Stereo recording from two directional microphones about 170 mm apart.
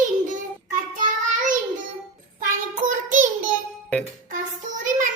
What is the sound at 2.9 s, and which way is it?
Child singing, 50° right (ahead or behind).